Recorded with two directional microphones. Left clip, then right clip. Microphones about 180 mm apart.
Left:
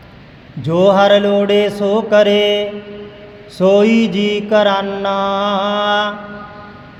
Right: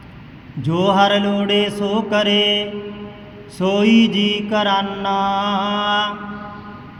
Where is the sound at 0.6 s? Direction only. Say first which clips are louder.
Left 5 dB; 30° left (ahead or behind).